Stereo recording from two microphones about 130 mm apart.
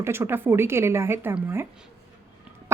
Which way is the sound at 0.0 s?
20° right (ahead or behind).